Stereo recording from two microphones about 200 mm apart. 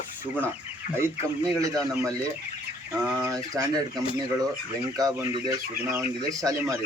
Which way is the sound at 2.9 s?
10° right (ahead or behind).